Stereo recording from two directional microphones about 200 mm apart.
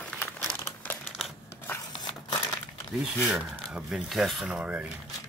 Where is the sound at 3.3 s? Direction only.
5° right (ahead or behind).